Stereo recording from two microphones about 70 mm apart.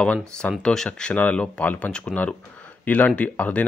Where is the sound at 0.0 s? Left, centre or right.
Centre.